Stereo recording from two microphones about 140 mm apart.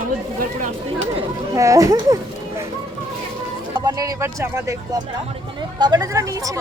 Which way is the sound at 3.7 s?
30° right (ahead or behind).